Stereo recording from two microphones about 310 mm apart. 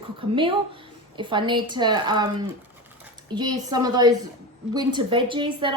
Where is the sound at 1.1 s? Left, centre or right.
Centre.